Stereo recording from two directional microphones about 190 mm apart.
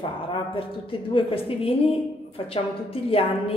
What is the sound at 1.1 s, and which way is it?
A woman's voice, 30° left (ahead or behind).